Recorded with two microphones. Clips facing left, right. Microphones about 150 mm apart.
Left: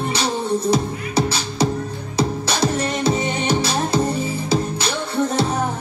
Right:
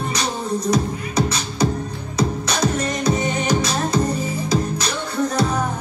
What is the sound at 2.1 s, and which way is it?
Music, 30° left (ahead or behind).